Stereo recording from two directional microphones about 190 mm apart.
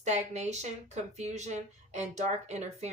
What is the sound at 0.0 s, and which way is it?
Speech, 35° right (ahead or behind).